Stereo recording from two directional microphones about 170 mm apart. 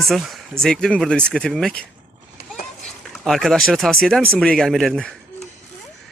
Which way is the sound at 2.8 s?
Centre (ahead or behind).